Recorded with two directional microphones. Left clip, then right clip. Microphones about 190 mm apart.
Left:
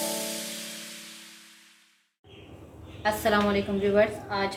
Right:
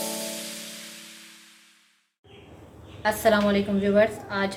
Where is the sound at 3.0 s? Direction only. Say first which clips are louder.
Right 3 dB; 55° right (ahead or behind).